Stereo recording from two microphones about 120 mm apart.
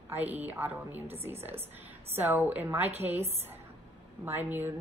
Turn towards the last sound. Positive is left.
turn(degrees=-15)  # may be behind; listen again after turning